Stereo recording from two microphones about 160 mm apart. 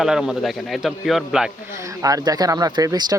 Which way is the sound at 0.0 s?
5° right (ahead or behind).